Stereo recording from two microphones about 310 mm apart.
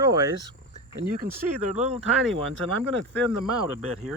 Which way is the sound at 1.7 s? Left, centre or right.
Centre.